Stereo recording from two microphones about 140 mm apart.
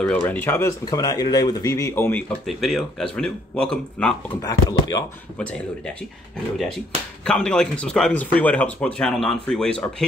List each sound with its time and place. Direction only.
0.0 s speech: 10° left (ahead or behind)
2.4 s speech: centre (ahead or behind)
4.4 s speech: 25° left (ahead or behind)
5.4 s speech: 10° left (ahead or behind)
7.2 s speech: 5° left (ahead or behind)